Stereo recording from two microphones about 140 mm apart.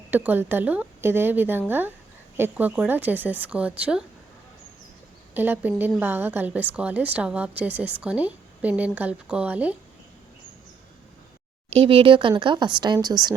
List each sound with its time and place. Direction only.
0.1 s a woman's voice: 15° right (ahead or behind)
5.3 s a woman's voice: 15° right (ahead or behind)
11.7 s speech: 40° right (ahead or behind)